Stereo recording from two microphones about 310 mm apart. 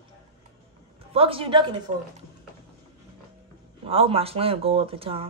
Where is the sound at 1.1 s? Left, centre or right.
Centre.